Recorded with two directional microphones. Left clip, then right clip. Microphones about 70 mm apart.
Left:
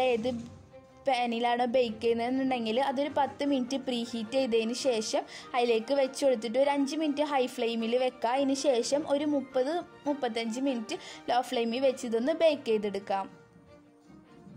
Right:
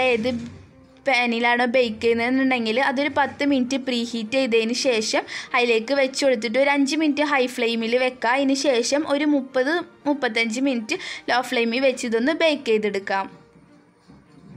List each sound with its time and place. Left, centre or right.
0.0 s music: left
1.0 s a woman's voice: left